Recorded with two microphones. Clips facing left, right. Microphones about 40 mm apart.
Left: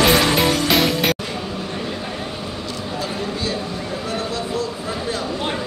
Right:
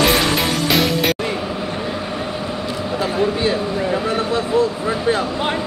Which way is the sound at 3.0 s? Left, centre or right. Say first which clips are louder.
Right 8 dB; right.